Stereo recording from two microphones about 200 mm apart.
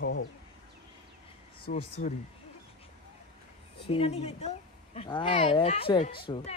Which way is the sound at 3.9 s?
30° left (ahead or behind).